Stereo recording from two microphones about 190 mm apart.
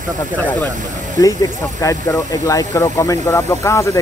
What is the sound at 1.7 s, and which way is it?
Speech, 15° left (ahead or behind).